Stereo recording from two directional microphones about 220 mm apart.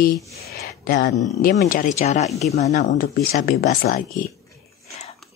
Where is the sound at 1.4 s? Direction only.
35° left (ahead or behind).